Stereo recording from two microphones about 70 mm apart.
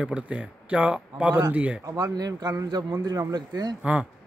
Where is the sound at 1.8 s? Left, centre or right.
Right.